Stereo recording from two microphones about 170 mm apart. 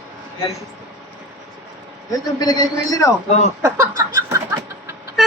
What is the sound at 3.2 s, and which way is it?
Speech, 40° left (ahead or behind).